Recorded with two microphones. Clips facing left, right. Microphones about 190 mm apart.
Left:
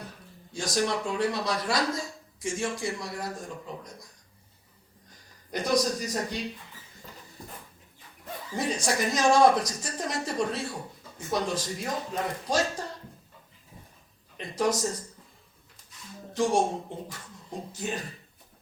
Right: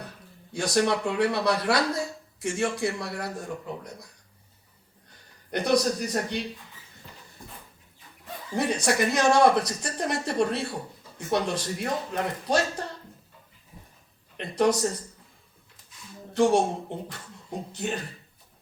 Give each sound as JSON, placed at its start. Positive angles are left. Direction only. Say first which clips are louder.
{"t": 0.5, "sound": "speech", "louder": "right 4 dB", "side_deg": -65}
{"t": 5.1, "sound": "speech", "louder": "right 3 dB", "side_deg": -65}
{"t": 8.5, "sound": "speech", "louder": "right 4 dB", "side_deg": -65}
{"t": 14.3, "sound": "speech", "louder": "right 4 dB", "side_deg": -65}
{"t": 16.3, "sound": "speech", "louder": "right 4 dB", "side_deg": -65}